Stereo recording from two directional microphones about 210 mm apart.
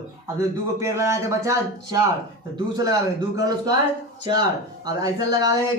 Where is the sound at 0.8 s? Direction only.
15° right (ahead or behind).